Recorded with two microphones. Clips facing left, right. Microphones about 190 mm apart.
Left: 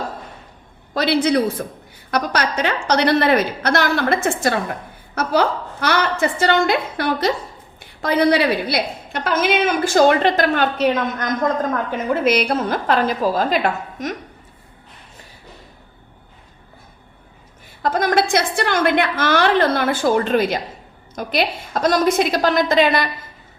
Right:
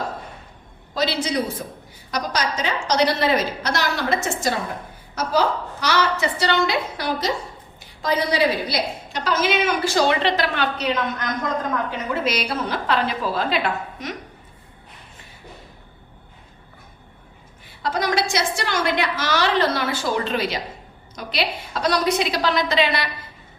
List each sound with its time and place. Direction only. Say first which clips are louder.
0.9 s a woman's voice: left 6 dB; 60° left (ahead or behind)
17.8 s a woman's voice: left 5 dB; 50° left (ahead or behind)